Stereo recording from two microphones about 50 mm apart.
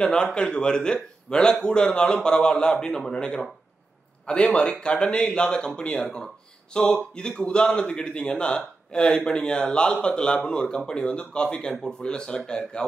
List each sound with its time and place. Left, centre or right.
0.0 s a man's voice: centre